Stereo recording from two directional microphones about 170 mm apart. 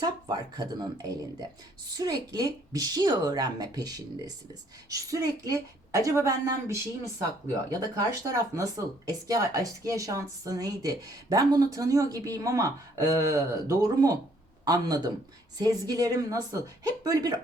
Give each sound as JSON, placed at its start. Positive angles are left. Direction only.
{"t": 0.0, "sound": "speech", "side_deg": -25}